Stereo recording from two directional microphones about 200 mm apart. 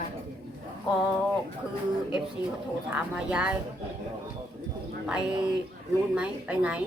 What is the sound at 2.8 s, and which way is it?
Speech, 5° right (ahead or behind).